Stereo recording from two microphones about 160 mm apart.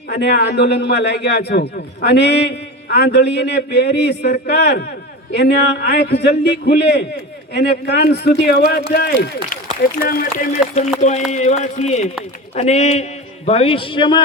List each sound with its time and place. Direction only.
0.1 s a man's voice: 90° left
10.0 s speech: 65° left (ahead or behind)
11.3 s a man's voice: 45° left (ahead or behind)